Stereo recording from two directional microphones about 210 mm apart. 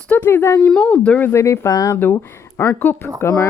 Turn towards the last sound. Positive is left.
turn(degrees=10)  # may be behind; listen again after turning